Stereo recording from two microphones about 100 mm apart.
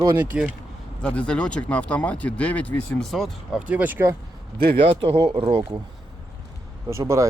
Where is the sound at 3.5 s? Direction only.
15° right (ahead or behind).